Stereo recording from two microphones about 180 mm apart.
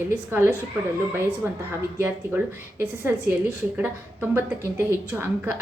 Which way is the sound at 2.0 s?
15° right (ahead or behind).